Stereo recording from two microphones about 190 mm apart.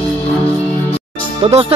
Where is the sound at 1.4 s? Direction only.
30° right (ahead or behind).